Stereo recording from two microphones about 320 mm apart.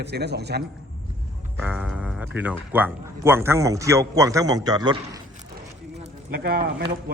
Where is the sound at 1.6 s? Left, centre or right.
Centre.